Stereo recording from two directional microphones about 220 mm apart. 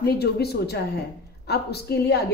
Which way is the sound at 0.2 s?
45° left (ahead or behind).